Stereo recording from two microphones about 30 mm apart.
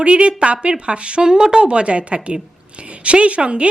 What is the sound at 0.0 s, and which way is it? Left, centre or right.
Speech, right.